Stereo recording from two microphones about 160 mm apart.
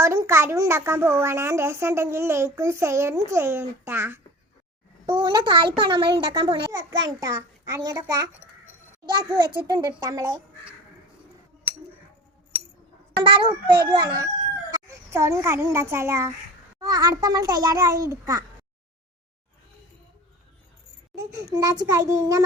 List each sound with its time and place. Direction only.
0.0 s a woman's voice: 20° right (ahead or behind)
5.0 s a child's voice: 25° right (ahead or behind)
13.2 s a child's voice: 30° right (ahead or behind)
14.7 s a child's voice: 20° right (ahead or behind)
21.2 s a child's voice: 20° right (ahead or behind)